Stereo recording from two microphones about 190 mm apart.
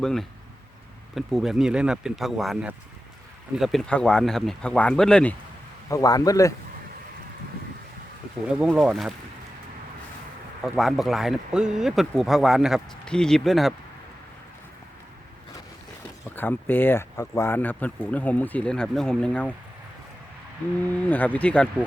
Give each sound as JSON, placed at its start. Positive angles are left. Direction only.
{"t": 0.0, "sound": "a man's voice", "side_deg": 0}
{"t": 5.9, "sound": "speech", "side_deg": 20}
{"t": 8.4, "sound": "a man's voice", "side_deg": -5}
{"t": 10.6, "sound": "a man's voice", "side_deg": 0}
{"t": 16.2, "sound": "speech", "side_deg": 10}
{"t": 21.0, "sound": "speech", "side_deg": 10}